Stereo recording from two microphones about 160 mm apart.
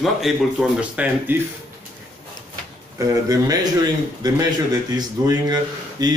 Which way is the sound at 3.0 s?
20° right (ahead or behind).